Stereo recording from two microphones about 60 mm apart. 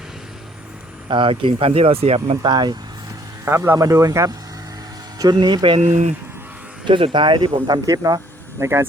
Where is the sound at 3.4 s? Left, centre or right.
Right.